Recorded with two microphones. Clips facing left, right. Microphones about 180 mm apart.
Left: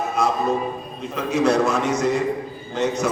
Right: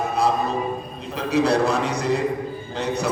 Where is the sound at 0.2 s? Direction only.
35° right (ahead or behind).